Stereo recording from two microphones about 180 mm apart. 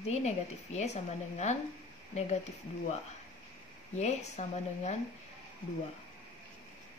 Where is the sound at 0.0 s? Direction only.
35° left (ahead or behind).